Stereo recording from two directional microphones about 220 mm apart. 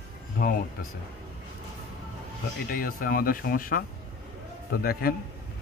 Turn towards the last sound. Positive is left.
turn(degrees=45)  # may be behind; listen again after turning